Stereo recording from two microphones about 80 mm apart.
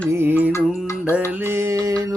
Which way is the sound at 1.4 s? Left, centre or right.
Right.